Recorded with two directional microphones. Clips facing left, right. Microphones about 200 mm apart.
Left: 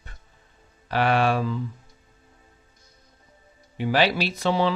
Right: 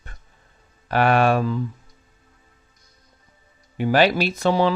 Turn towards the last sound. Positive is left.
turn(degrees=-45)  # may be behind; listen again after turning